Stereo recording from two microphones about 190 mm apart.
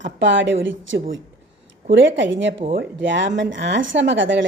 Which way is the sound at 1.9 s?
75° right (ahead or behind).